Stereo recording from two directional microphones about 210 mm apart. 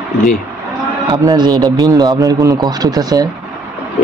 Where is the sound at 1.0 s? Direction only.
20° right (ahead or behind).